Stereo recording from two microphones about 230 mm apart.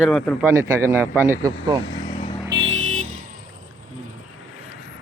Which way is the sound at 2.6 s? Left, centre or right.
Right.